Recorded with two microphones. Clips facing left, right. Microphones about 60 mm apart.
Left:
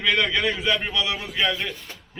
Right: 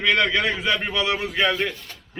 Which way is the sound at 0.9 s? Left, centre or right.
Right.